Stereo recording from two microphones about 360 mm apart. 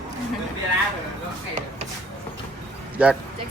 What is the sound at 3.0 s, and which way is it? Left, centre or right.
Speech, centre.